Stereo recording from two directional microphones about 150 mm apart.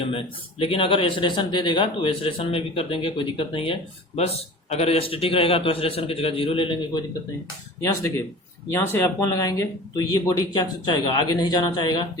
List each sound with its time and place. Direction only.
0.0 s a man's voice: 40° left (ahead or behind)
8.7 s speech: 15° left (ahead or behind)